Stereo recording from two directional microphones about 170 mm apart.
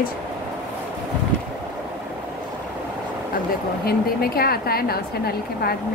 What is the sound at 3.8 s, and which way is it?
A woman's voice, 65° left (ahead or behind).